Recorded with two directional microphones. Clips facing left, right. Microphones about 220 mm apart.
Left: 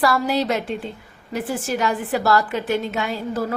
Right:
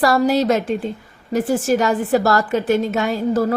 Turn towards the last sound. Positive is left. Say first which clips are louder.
# right 7 dB
turn(degrees=-45)  # may be behind; listen again after turning